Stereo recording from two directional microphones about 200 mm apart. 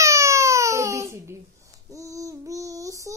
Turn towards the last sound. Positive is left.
turn(degrees=-15)  # may be behind; listen again after turning